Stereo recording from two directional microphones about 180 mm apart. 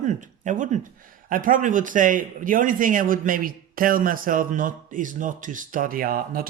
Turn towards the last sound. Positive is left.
turn(degrees=-55)  # may be behind; listen again after turning